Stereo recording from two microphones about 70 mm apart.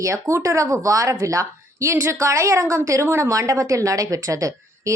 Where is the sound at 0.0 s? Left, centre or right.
Right.